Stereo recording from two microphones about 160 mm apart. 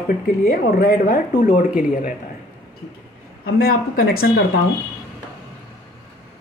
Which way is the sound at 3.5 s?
70° left (ahead or behind).